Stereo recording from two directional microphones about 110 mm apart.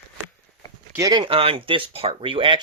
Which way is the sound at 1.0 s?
40° right (ahead or behind).